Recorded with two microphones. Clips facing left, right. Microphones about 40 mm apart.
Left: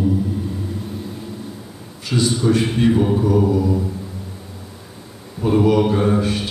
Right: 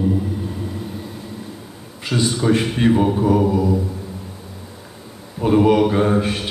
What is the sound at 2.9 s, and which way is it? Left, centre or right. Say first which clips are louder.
Mantra: right 1 dB; centre.